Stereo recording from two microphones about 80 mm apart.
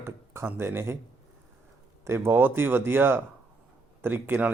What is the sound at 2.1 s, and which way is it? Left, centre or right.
Speech, right.